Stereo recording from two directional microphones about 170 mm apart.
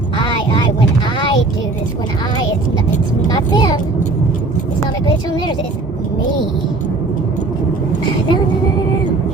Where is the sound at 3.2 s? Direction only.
25° left (ahead or behind).